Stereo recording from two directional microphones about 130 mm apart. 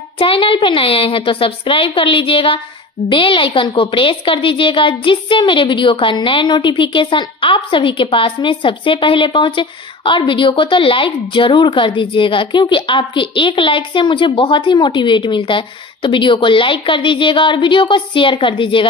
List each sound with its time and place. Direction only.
0.2 s a woman's voice: 45° left (ahead or behind)